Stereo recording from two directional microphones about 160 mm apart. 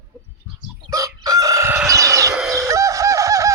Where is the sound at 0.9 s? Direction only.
25° right (ahead or behind).